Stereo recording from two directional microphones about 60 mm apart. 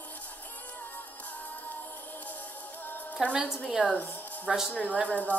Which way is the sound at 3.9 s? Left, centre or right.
Left.